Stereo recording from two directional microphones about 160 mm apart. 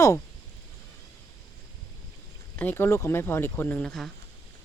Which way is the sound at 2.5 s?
15° left (ahead or behind).